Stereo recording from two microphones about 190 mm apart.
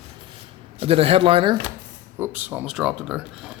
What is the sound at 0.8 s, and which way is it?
Speech, 30° right (ahead or behind).